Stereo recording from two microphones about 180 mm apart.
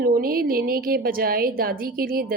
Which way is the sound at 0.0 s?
55° right (ahead or behind).